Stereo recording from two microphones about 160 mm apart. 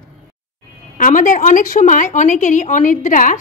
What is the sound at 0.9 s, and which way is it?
A woman's voice, 55° left (ahead or behind).